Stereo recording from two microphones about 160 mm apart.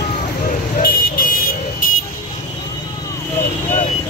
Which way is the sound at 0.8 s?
65° left (ahead or behind).